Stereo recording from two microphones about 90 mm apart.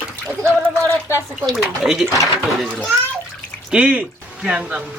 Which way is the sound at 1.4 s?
Centre (ahead or behind).